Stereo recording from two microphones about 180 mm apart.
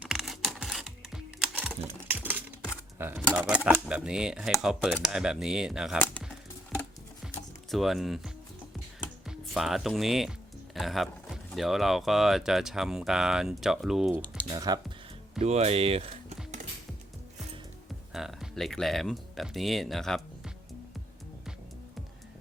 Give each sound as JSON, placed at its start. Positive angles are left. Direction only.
{"t": 0.0, "sound": "music", "side_deg": 0}
{"t": 3.3, "sound": "speech", "side_deg": -5}
{"t": 7.7, "sound": "speech", "side_deg": 0}
{"t": 14.5, "sound": "speech", "side_deg": -20}
{"t": 15.4, "sound": "speech", "side_deg": -35}
{"t": 18.1, "sound": "speech", "side_deg": 0}